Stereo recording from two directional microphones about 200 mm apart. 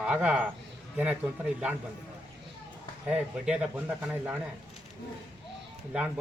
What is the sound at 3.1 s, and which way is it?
Speech, 5° right (ahead or behind).